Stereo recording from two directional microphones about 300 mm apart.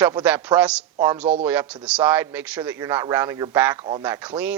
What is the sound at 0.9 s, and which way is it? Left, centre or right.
Speech, centre.